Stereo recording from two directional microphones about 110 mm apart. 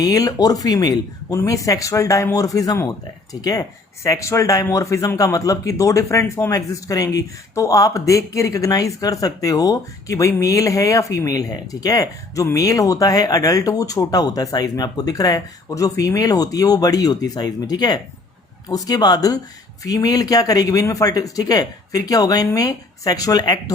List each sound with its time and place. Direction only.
0.0 s speech: 35° left (ahead or behind)